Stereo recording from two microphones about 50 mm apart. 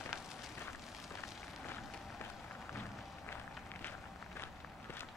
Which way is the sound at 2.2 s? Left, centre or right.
Left.